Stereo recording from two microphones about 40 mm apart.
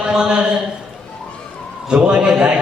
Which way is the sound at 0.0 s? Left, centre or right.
Right.